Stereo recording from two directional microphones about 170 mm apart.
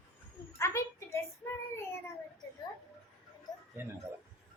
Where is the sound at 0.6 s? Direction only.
15° left (ahead or behind).